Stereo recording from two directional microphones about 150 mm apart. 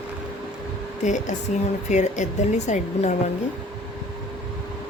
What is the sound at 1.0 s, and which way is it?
A woman's voice, 55° left (ahead or behind).